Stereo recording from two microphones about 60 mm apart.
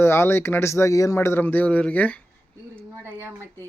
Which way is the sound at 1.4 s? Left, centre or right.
Left.